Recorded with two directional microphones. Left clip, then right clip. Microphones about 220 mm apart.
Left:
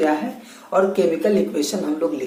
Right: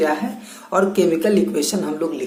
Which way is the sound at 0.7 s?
45° right (ahead or behind).